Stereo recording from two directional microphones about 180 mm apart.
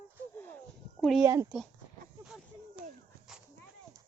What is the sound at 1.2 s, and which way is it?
Speech, 15° right (ahead or behind).